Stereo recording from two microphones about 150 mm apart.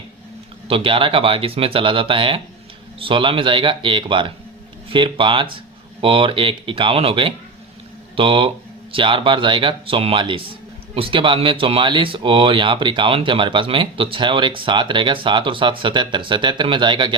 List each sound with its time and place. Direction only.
0.7 s speech: 35° right (ahead or behind)